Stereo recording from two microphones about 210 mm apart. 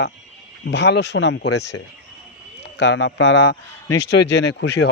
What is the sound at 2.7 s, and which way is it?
Speech, 60° left (ahead or behind).